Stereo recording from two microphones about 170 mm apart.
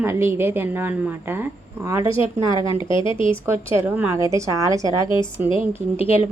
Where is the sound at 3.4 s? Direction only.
15° right (ahead or behind).